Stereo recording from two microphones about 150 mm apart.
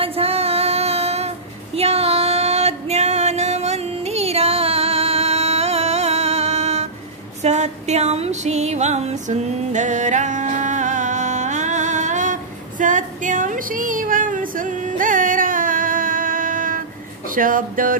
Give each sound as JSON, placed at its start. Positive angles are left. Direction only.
{"t": 0.0, "sound": "female singing", "side_deg": -40}
{"t": 7.4, "sound": "music", "side_deg": -50}
{"t": 17.4, "sound": "speech", "side_deg": -65}